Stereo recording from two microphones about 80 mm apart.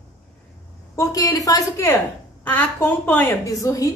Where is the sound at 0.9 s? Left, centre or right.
Left.